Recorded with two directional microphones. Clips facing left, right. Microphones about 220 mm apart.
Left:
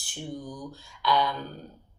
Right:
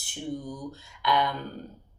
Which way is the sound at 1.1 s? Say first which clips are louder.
Even; 20° right (ahead or behind).